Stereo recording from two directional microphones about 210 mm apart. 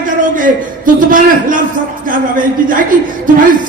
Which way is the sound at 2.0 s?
40° right (ahead or behind).